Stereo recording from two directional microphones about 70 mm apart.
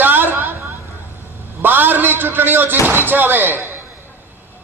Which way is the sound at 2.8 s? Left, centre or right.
Right.